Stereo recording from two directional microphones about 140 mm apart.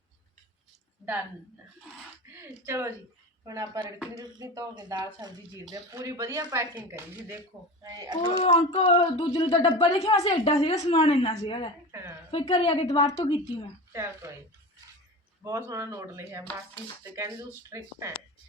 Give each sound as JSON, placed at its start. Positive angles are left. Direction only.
{"t": 2.2, "sound": "a sound", "side_deg": -15}
{"t": 3.4, "sound": "speech", "side_deg": -25}
{"t": 8.3, "sound": "a woman's voice", "side_deg": 50}
{"t": 13.9, "sound": "speech", "side_deg": -20}
{"t": 15.4, "sound": "speech", "side_deg": -20}